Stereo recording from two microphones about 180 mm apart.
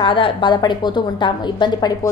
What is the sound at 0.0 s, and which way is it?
A woman's voice, 30° left (ahead or behind).